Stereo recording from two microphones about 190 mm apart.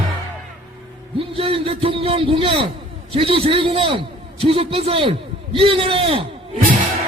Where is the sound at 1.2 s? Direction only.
30° right (ahead or behind).